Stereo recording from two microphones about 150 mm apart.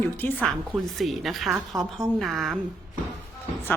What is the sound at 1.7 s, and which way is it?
Speech, 20° right (ahead or behind).